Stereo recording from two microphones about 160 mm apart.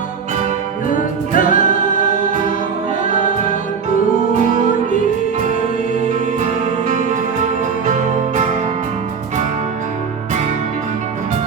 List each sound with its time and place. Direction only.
0.9 s music: 55° left (ahead or behind)
6.8 s music: 50° right (ahead or behind)